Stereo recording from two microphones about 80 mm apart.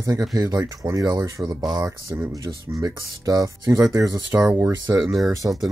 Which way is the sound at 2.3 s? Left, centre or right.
Right.